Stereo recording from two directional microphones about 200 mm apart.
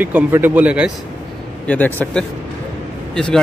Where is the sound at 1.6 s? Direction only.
10° left (ahead or behind).